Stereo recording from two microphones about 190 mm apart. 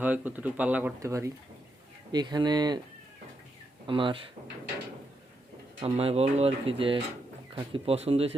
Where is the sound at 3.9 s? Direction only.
25° right (ahead or behind).